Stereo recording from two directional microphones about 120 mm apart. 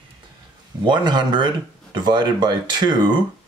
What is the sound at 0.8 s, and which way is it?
Speech, 40° right (ahead or behind).